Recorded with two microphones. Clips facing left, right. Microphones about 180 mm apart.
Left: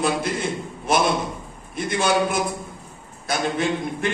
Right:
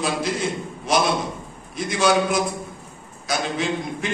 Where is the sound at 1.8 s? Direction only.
55° left (ahead or behind).